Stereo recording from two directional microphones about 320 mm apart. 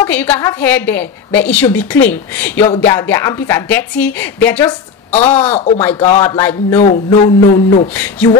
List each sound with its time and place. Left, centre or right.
0.0 s a woman's voice: centre
5.6 s a man's voice: centre
7.9 s a woman's voice: centre